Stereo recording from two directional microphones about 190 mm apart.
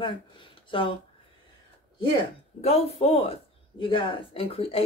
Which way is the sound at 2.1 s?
35° left (ahead or behind).